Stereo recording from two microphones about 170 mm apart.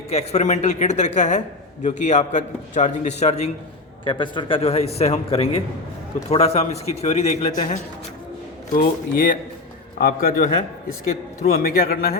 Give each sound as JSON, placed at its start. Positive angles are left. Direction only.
{"t": 0.1, "sound": "a man's voice", "side_deg": 40}
{"t": 4.0, "sound": "a man's voice", "side_deg": 30}
{"t": 8.7, "sound": "a man's voice", "side_deg": 55}